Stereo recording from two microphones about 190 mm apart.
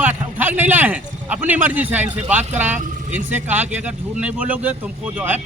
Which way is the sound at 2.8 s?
40° right (ahead or behind).